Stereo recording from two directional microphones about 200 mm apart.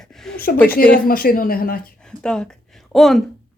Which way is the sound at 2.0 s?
5° left (ahead or behind).